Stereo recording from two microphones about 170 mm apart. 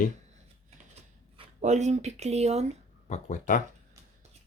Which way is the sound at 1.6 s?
45° right (ahead or behind).